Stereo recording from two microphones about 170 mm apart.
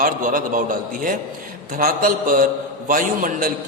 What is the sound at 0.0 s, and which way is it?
A man's voice, 55° right (ahead or behind).